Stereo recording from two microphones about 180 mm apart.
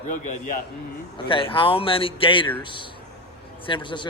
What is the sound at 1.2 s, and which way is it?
A man's voice, 30° left (ahead or behind).